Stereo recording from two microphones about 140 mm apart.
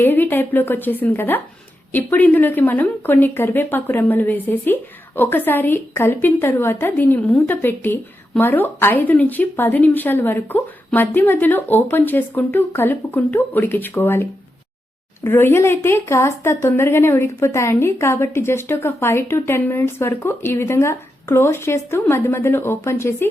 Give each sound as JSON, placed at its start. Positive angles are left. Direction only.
{"t": 0.0, "sound": "speech", "side_deg": 15}